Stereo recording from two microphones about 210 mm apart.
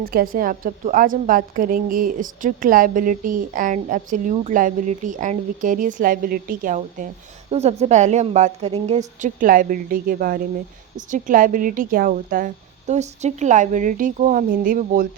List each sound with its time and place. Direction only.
0.0 s a woman's voice: 45° right (ahead or behind)